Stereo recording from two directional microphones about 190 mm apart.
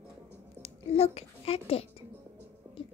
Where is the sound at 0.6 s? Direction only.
35° left (ahead or behind).